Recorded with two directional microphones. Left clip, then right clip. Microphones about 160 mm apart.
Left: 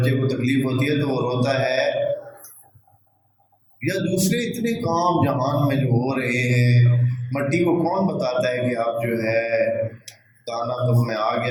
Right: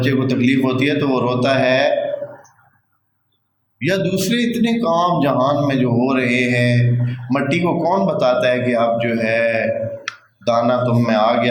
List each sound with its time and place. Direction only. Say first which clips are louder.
0.0 s a man's voice: right 5 dB; 50° right (ahead or behind)
3.8 s a man's voice: right 5 dB; 50° right (ahead or behind)